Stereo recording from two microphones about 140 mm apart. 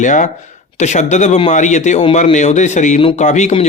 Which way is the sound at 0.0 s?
65° left (ahead or behind).